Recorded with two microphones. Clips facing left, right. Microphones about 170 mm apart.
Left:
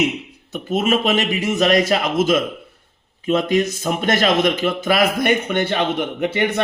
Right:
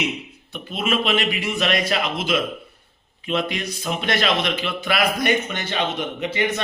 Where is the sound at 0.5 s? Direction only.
45° left (ahead or behind).